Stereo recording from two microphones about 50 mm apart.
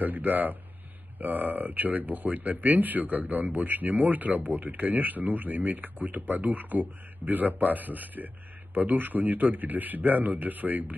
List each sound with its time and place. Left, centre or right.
0.0 s speech: right